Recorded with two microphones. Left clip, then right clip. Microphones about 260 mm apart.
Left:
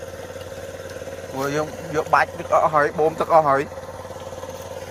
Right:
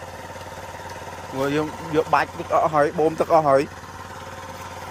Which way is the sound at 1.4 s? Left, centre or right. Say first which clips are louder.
Right 1 dB; centre.